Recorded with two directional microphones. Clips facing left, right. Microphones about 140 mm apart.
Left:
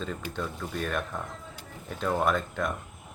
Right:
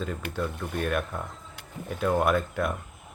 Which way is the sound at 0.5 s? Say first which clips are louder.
Right 2 dB; 60° right (ahead or behind).